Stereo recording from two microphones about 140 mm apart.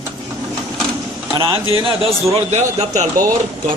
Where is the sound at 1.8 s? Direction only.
45° right (ahead or behind).